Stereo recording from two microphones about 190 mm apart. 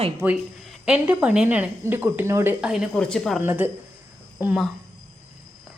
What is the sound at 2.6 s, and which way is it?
Speech, 5° right (ahead or behind).